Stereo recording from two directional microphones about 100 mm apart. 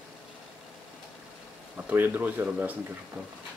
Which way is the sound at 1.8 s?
20° right (ahead or behind).